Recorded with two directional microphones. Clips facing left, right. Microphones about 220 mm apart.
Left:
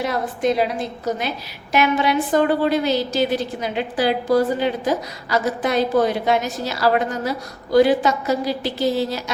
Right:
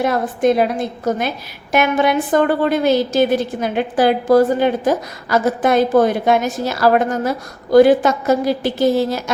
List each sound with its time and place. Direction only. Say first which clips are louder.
0.0 s a woman's voice: right 5 dB; 50° right (ahead or behind)